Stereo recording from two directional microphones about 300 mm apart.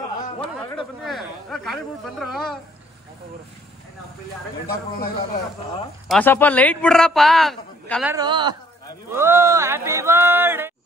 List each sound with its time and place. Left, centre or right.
0.2 s a sound: centre
1.0 s a man's voice: centre
4.9 s a man's voice: left
6.0 s a man's voice: centre